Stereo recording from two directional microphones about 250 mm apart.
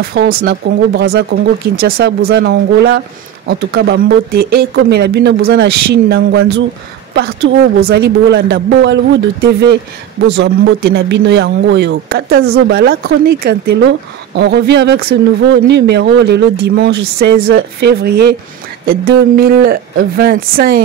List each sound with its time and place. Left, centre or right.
0.0 s speech: right